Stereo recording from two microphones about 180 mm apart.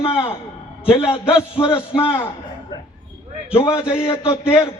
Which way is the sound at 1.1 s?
15° left (ahead or behind).